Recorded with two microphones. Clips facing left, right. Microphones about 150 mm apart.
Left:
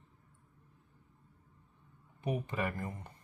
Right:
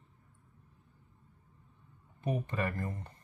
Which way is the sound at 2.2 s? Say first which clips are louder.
Right 1 dB; 15° left (ahead or behind).